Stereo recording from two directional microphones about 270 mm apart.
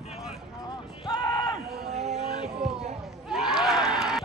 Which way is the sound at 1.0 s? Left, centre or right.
Centre.